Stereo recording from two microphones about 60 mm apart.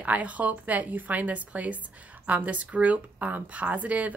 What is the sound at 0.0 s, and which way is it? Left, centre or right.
Speech, right.